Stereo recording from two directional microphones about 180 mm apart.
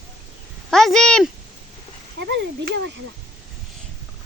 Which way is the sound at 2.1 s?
70° right (ahead or behind).